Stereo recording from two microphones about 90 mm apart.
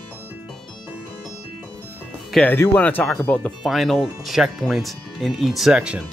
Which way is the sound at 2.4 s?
15° left (ahead or behind).